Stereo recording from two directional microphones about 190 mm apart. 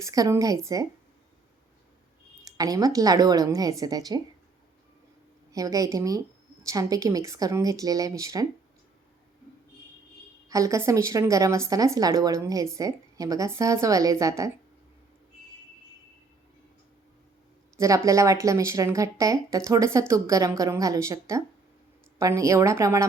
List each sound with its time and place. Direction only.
0.0 s speech: 15° right (ahead or behind)
2.4 s a woman's voice: 20° right (ahead or behind)
5.5 s speech: 20° right (ahead or behind)
10.5 s speech: 15° right (ahead or behind)
17.7 s speech: 15° right (ahead or behind)